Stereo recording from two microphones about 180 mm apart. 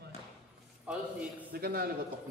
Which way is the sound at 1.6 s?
60° right (ahead or behind).